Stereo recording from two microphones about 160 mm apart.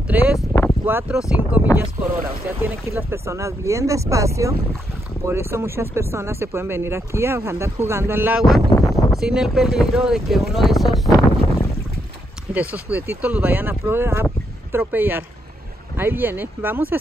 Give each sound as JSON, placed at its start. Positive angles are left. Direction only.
{"t": 0.1, "sound": "speech", "side_deg": -10}
{"t": 2.1, "sound": "speech", "side_deg": -65}
{"t": 2.6, "sound": "speech", "side_deg": -15}
{"t": 8.7, "sound": "a sound", "side_deg": 20}
{"t": 9.1, "sound": "speech", "side_deg": 0}
{"t": 12.5, "sound": "a sound", "side_deg": -5}
{"t": 12.9, "sound": "speech", "side_deg": -15}